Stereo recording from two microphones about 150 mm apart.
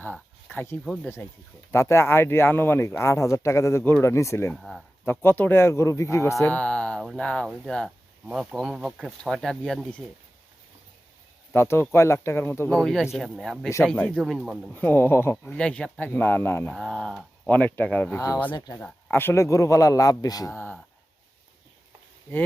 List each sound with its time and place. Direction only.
0.5 s a man's voice: 15° left (ahead or behind)
4.5 s speech: centre (ahead or behind)
5.0 s speech: 15° left (ahead or behind)
6.4 s speech: 10° left (ahead or behind)
11.5 s speech: 15° left (ahead or behind)
12.8 s speech: centre (ahead or behind)
14.7 s speech: 15° left (ahead or behind)
16.7 s speech: 5° left (ahead or behind)
17.5 s speech: 10° left (ahead or behind)
18.5 s a man's voice: 25° left (ahead or behind)
18.8 s a man's voice: 10° left (ahead or behind)